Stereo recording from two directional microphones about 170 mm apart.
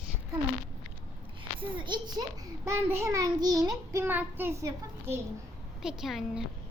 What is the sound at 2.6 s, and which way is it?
Child singing, 15° right (ahead or behind).